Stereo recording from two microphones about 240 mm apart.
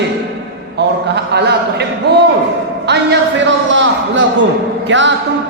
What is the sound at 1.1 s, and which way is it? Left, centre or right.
Speech, right.